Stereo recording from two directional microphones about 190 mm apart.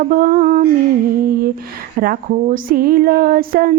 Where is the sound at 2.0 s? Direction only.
45° right (ahead or behind).